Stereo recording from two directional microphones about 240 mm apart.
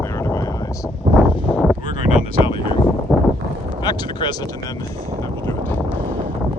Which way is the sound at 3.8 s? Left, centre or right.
Centre.